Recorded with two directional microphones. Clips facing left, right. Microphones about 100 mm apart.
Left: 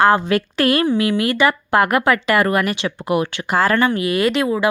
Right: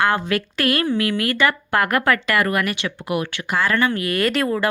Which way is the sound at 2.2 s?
25° left (ahead or behind).